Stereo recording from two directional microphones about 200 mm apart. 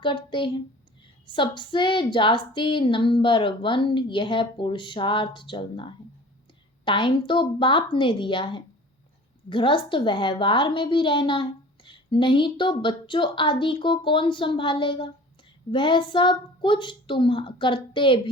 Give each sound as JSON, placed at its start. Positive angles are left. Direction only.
{"t": 0.0, "sound": "a woman's voice", "side_deg": 25}